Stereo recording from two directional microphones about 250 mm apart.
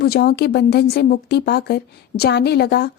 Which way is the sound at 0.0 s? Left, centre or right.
Left.